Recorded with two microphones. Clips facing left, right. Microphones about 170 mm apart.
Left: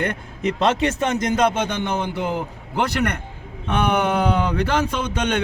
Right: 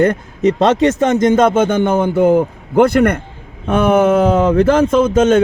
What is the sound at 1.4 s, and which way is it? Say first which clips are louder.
A man's voice: right 8 dB; 50° right (ahead or behind).